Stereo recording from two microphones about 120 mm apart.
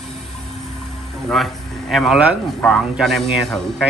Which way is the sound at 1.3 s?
Centre (ahead or behind).